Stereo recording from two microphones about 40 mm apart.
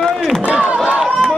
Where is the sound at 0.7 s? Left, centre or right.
Right.